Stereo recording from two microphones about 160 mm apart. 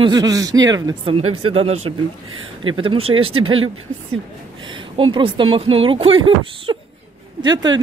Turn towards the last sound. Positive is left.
turn(degrees=-25)  # may be behind; listen again after turning